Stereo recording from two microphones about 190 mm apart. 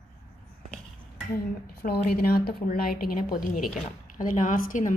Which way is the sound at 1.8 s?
55° left (ahead or behind).